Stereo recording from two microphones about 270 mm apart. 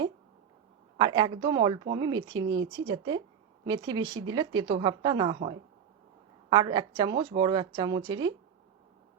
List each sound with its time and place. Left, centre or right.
0.9 s a woman's voice: centre
6.5 s a woman's voice: centre